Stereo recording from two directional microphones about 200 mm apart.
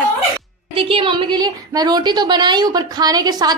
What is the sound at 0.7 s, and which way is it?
A woman's voice, 25° right (ahead or behind).